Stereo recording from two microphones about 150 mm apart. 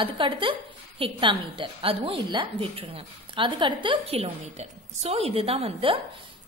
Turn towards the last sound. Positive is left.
turn(degrees=-40)  # may be behind; listen again after turning